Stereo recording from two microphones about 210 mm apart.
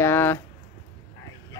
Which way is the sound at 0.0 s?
10° left (ahead or behind).